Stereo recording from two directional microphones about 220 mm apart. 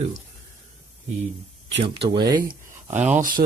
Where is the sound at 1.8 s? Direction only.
25° right (ahead or behind).